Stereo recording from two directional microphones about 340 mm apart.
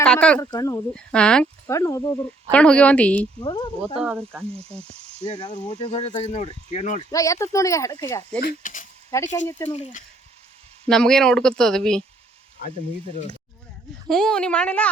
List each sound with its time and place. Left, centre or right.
0.0 s speech: centre
4.0 s speech: centre
5.4 s speech: centre
7.1 s speech: centre
8.4 s speech: left
9.0 s speech: centre
9.6 s speech: centre
10.8 s speech: centre
14.1 s speech: centre